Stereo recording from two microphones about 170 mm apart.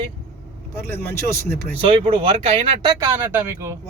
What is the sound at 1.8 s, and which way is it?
Speech, 35° right (ahead or behind).